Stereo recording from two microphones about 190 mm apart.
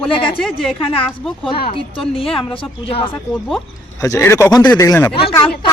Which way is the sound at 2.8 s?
30° left (ahead or behind).